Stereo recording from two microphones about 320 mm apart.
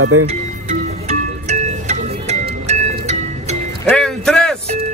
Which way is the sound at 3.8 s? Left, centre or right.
Centre.